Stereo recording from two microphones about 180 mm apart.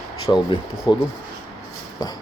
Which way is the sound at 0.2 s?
25° left (ahead or behind).